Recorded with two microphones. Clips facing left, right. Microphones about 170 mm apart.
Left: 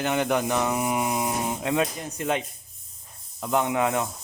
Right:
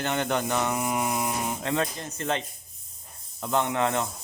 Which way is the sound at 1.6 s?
10° left (ahead or behind).